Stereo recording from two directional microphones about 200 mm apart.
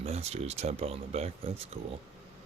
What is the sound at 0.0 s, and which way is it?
Speech, 30° right (ahead or behind).